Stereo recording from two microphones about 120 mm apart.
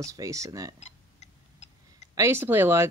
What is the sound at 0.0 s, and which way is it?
Speech, 30° right (ahead or behind).